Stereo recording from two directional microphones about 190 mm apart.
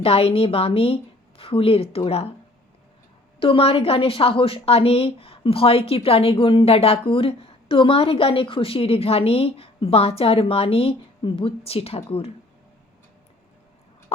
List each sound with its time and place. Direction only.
0.0 s a woman's voice: 30° left (ahead or behind)
3.4 s a woman's voice: 30° left (ahead or behind)